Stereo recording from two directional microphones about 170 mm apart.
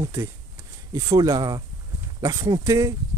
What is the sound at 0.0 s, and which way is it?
Speech, 15° right (ahead or behind).